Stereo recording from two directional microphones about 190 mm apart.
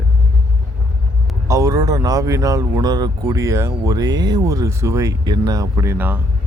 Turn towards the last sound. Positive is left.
turn(degrees=-10)  # may be behind; listen again after turning